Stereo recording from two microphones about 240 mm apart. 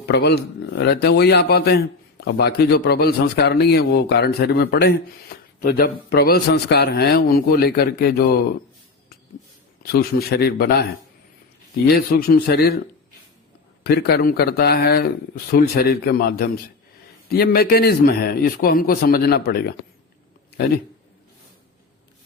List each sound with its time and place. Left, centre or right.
0.1 s a man's voice: left
9.9 s a man's voice: left
11.9 s a man's voice: left
13.8 s a man's voice: left